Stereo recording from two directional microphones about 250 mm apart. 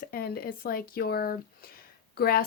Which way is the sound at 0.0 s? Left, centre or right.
Left.